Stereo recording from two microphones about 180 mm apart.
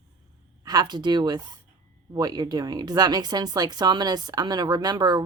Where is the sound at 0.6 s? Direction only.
20° right (ahead or behind).